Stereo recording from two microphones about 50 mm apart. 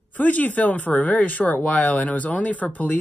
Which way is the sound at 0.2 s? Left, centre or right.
Left.